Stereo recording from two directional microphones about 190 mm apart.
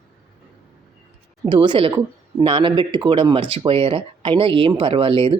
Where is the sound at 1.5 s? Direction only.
25° right (ahead or behind).